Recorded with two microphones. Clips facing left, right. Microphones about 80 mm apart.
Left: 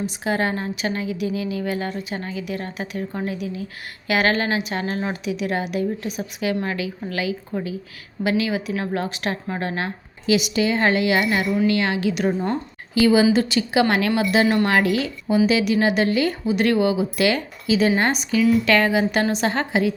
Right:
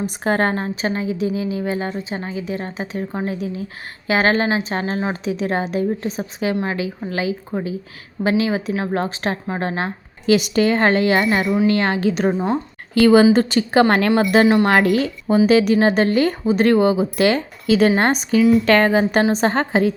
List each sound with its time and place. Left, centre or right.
0.0 s a woman's voice: right
10.2 s a woman's voice: right
12.9 s a woman's voice: right
17.7 s a woman's voice: right